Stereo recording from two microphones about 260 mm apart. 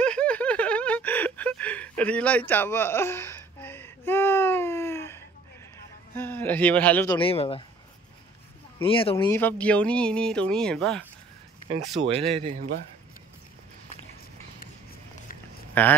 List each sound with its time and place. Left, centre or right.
0.0 s a sound: centre
6.1 s speech: centre
7.2 s speech: left
8.8 s speech: left; by 11.1 s centre
12.4 s speech: right
15.8 s speech: centre